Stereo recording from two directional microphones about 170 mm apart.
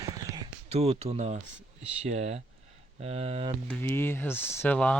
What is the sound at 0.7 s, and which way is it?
Speech, 40° right (ahead or behind).